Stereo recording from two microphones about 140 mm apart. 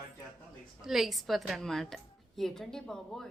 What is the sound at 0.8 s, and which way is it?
A woman's voice, centre (ahead or behind).